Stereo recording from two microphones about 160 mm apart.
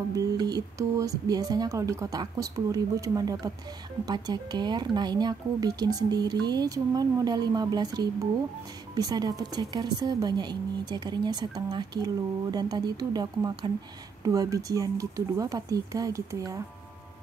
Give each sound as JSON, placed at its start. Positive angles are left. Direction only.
{"t": 0.1, "sound": "speech", "side_deg": -25}